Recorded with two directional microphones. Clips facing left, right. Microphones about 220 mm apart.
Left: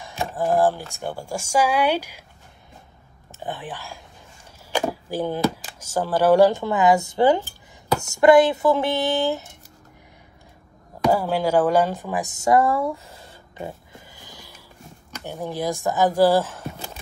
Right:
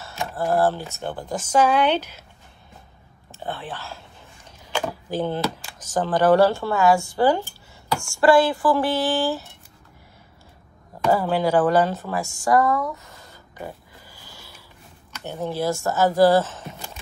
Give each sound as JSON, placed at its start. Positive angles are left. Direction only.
{"t": 0.0, "sound": "speech", "side_deg": 15}
{"t": 3.3, "sound": "speech", "side_deg": 15}
{"t": 11.0, "sound": "speech", "side_deg": 10}